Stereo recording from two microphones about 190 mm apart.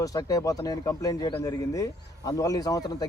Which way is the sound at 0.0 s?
20° left (ahead or behind).